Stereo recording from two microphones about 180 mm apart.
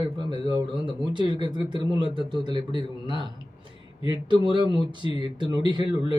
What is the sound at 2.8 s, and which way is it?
Speech, 25° right (ahead or behind).